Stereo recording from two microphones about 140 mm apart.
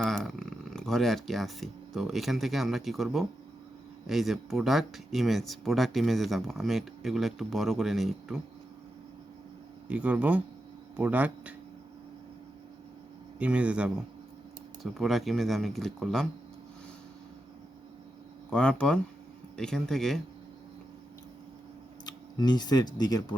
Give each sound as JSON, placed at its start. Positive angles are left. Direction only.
{"t": 0.0, "sound": "speech", "side_deg": 0}
{"t": 9.9, "sound": "speech", "side_deg": -10}
{"t": 13.4, "sound": "speech", "side_deg": -10}
{"t": 14.9, "sound": "speech", "side_deg": 0}
{"t": 18.5, "sound": "speech", "side_deg": 5}
{"t": 22.0, "sound": "speech", "side_deg": 30}